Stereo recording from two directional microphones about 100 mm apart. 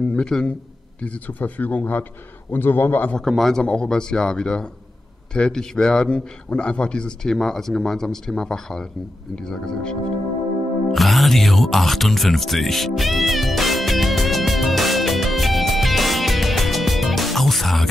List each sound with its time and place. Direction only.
0.1 s a man's voice: 5° left (ahead or behind)
3.2 s a man's voice: centre (ahead or behind)
10.9 s music: centre (ahead or behind)